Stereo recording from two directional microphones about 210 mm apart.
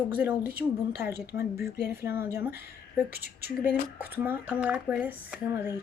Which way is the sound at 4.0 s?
10° right (ahead or behind).